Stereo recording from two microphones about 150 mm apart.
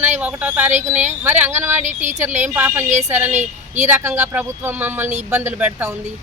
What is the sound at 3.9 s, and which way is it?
Speech, 15° right (ahead or behind).